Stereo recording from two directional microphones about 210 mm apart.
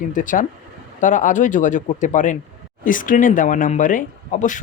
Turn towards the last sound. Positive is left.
turn(degrees=35)  # may be behind; listen again after turning